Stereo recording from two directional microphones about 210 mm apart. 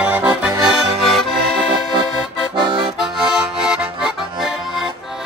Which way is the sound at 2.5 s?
20° right (ahead or behind).